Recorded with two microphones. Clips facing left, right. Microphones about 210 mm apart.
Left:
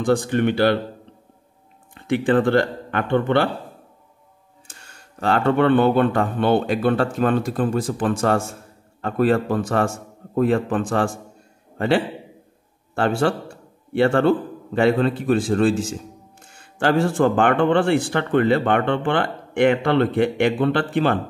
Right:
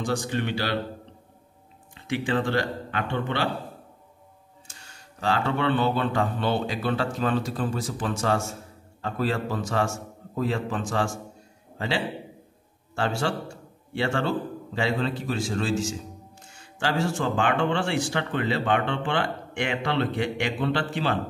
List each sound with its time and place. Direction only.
0.0 s a man's voice: 55° left (ahead or behind)
2.0 s speech: 55° left (ahead or behind)
4.6 s a man's voice: 55° left (ahead or behind)